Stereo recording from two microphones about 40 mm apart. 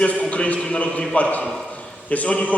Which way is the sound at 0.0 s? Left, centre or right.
Left.